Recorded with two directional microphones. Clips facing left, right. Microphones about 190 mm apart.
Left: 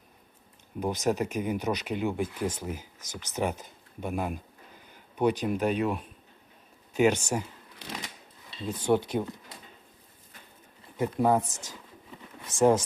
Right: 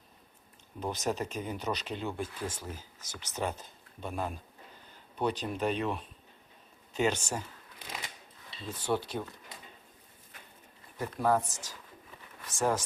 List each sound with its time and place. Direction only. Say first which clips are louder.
0.8 s speech: left 5 dB; 15° left (ahead or behind)
8.6 s speech: left 7 dB; 15° left (ahead or behind)
10.9 s speech: left 4 dB; 20° left (ahead or behind)